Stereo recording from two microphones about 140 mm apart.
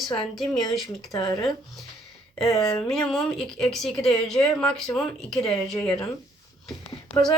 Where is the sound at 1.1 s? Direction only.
30° left (ahead or behind).